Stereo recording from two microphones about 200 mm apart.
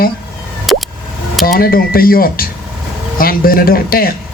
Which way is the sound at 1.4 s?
45° left (ahead or behind).